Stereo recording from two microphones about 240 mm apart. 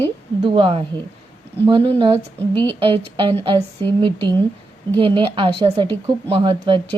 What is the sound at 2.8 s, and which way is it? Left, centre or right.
A woman's voice, right.